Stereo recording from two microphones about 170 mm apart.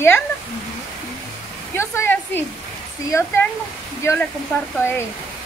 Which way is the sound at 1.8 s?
15° left (ahead or behind).